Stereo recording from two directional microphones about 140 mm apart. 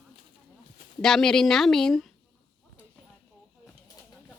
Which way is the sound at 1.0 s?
5° left (ahead or behind).